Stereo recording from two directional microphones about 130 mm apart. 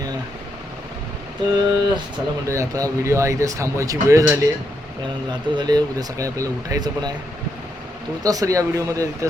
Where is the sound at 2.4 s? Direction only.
25° right (ahead or behind).